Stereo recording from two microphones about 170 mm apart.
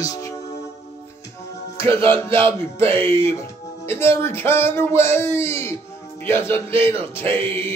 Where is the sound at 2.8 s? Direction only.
15° left (ahead or behind).